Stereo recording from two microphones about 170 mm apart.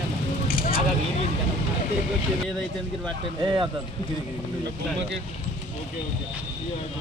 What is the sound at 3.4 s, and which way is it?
Speech, 25° right (ahead or behind).